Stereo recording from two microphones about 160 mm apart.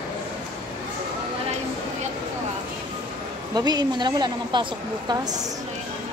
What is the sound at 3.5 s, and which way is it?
A woman's voice, 25° right (ahead or behind).